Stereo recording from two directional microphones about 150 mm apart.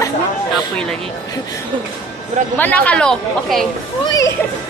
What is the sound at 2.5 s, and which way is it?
Speech, 10° left (ahead or behind).